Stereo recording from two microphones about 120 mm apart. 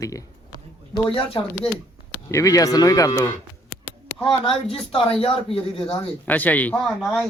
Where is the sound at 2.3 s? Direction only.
30° left (ahead or behind).